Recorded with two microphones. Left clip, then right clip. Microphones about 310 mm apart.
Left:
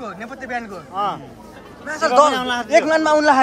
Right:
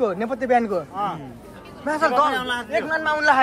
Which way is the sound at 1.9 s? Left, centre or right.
Centre.